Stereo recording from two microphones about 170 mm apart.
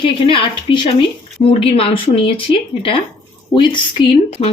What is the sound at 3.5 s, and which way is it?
Speech, 30° left (ahead or behind).